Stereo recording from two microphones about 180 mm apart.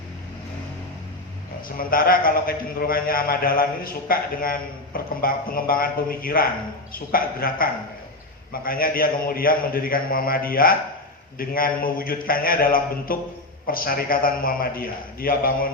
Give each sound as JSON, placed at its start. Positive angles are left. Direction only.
{"t": 1.6, "sound": "a man's voice", "side_deg": 55}